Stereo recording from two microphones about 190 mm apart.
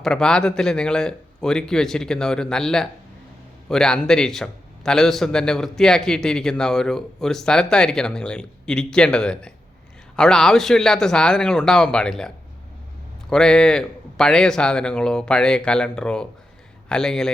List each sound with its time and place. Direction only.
0.0 s a man's voice: 5° left (ahead or behind)
13.3 s a man's voice: 5° left (ahead or behind)